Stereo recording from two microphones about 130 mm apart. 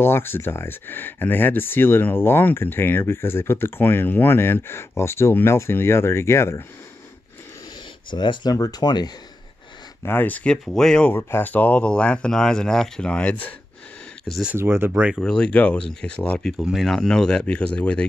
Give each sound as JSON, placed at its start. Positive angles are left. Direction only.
{"t": 0.0, "sound": "speech", "side_deg": 20}
{"t": 8.1, "sound": "speech", "side_deg": 35}
{"t": 10.0, "sound": "speech", "side_deg": 15}
{"t": 11.1, "sound": "speech", "side_deg": 15}
{"t": 14.2, "sound": "speech", "side_deg": 0}
{"t": 14.5, "sound": "speech", "side_deg": -15}
{"t": 15.1, "sound": "speech", "side_deg": 5}